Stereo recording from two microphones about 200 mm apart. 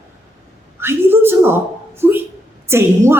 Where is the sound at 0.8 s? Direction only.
10° right (ahead or behind).